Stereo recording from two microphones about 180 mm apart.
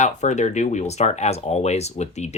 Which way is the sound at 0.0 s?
40° left (ahead or behind).